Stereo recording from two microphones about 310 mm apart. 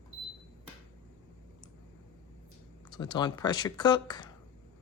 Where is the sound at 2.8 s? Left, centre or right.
Centre.